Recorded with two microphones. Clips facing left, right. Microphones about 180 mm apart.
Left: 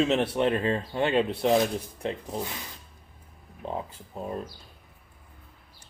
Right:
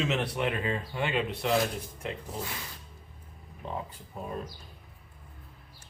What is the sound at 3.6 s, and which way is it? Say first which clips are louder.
Speech: left 4 dB; 35° left (ahead or behind).